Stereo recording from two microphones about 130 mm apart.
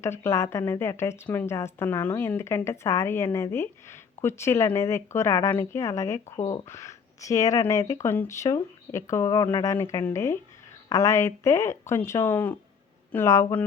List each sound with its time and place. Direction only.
0.0 s a woman's voice: 20° left (ahead or behind)